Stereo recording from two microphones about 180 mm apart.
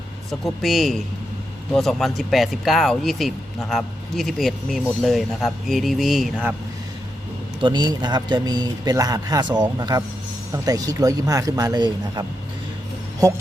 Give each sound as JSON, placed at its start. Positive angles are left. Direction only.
{"t": 0.3, "sound": "speech", "side_deg": 0}
{"t": 7.6, "sound": "a man's voice", "side_deg": -25}